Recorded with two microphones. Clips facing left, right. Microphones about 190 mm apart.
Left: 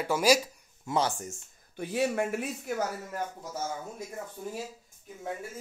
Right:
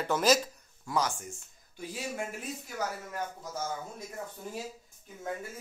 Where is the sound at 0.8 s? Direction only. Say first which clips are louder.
Left 2 dB; 25° left (ahead or behind).